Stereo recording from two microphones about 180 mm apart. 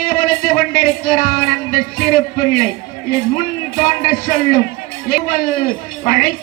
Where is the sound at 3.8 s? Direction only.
55° left (ahead or behind).